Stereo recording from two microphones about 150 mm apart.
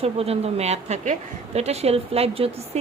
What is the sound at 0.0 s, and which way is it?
Speech, 40° right (ahead or behind).